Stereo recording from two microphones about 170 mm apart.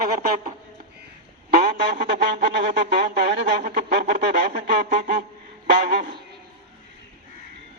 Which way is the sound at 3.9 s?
75° right (ahead or behind).